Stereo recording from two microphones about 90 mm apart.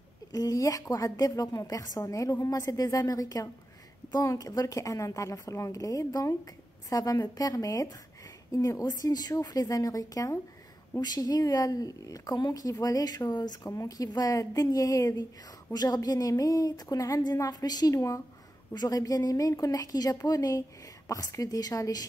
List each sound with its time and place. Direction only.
0.3 s a woman's voice: 40° left (ahead or behind)